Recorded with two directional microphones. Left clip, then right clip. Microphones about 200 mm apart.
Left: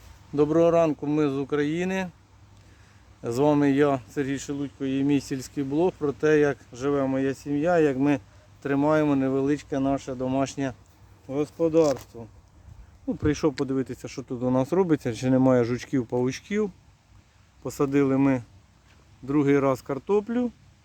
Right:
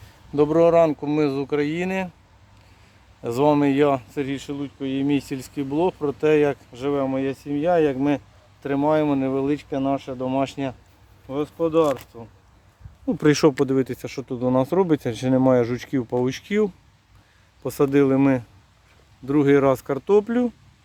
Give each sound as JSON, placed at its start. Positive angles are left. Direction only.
{"t": 0.3, "sound": "speech", "side_deg": -10}
{"t": 3.2, "sound": "speech", "side_deg": 0}
{"t": 13.1, "sound": "speech", "side_deg": -55}
{"t": 13.7, "sound": "speech", "side_deg": -30}